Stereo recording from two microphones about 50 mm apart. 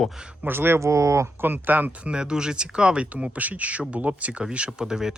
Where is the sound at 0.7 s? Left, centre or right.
Right.